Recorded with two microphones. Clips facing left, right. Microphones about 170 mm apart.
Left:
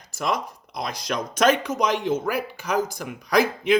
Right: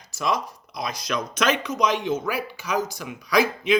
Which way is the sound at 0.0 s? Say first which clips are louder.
Even; 55° left (ahead or behind).